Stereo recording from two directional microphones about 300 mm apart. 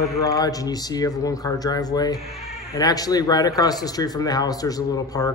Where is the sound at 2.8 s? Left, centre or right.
Centre.